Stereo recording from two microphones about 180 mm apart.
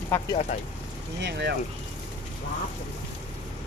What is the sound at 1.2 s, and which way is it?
Speech, 70° right (ahead or behind).